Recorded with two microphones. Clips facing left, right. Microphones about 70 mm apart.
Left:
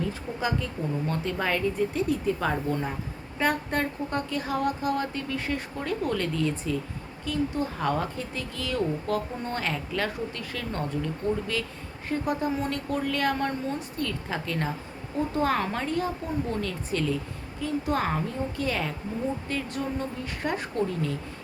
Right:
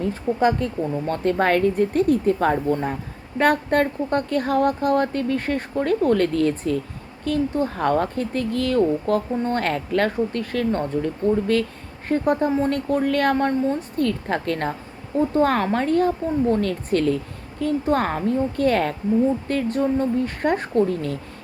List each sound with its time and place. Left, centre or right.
0.0 s speech: right
3.3 s a woman's voice: right